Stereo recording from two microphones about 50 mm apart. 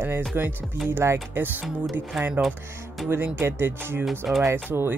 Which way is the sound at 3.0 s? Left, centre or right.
Right.